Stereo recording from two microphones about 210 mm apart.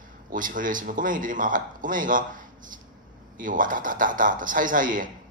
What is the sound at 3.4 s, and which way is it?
Speech, 40° right (ahead or behind).